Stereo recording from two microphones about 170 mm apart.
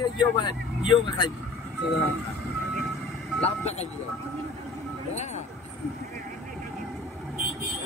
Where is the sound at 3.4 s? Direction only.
40° left (ahead or behind).